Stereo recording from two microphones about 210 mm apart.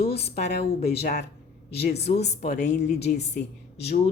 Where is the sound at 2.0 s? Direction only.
30° left (ahead or behind).